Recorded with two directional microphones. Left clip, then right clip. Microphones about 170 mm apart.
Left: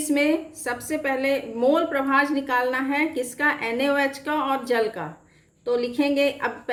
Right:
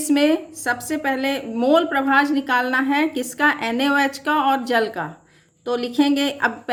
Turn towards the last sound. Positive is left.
turn(degrees=-55)  # may be behind; listen again after turning